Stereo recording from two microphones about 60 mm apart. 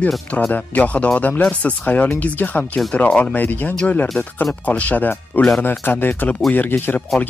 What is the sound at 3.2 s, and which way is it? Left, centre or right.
Speech, left.